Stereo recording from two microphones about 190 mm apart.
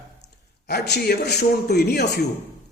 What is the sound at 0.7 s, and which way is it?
A man's voice, 60° left (ahead or behind).